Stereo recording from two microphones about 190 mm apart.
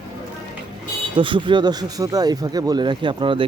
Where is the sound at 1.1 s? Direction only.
25° right (ahead or behind).